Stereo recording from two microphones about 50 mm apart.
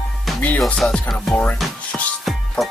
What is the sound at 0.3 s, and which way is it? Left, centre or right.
Music, centre.